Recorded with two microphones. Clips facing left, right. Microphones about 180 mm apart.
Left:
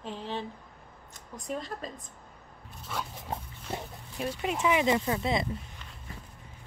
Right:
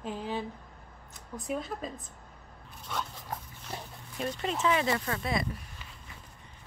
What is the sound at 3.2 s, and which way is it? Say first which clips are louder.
Dog: left 3 dB; 25° left (ahead or behind).